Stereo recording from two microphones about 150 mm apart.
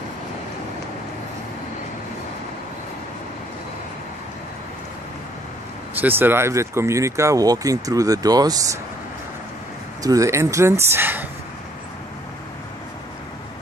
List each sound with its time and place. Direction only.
5.9 s speech: 15° right (ahead or behind)
10.0 s speech: 20° right (ahead or behind)